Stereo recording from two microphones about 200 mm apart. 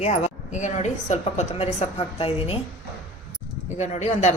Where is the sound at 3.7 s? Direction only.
35° left (ahead or behind).